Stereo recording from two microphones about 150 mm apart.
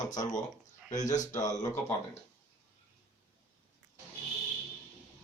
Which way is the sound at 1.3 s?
25° left (ahead or behind).